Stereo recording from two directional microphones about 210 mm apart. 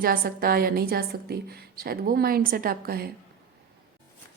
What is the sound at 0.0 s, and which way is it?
A woman's voice, 45° right (ahead or behind).